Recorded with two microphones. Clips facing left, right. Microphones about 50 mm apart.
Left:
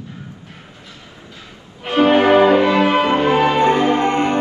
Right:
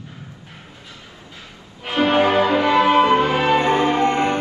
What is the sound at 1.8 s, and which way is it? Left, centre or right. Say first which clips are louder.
Music: left 4 dB; left.